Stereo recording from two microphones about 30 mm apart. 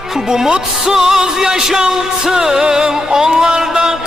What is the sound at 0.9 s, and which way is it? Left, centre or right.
Music, centre.